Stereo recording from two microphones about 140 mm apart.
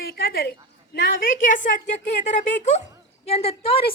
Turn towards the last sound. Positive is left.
turn(degrees=45)  # may be behind; listen again after turning